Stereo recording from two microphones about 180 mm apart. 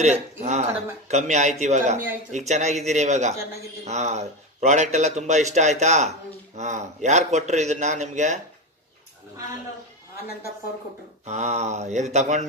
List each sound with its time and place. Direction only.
0.0 s a man's voice: 40° right (ahead or behind)
11.3 s a man's voice: 40° right (ahead or behind)